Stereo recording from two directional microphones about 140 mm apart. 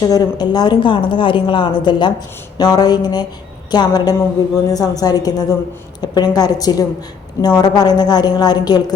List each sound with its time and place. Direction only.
0.0 s speech: 30° left (ahead or behind)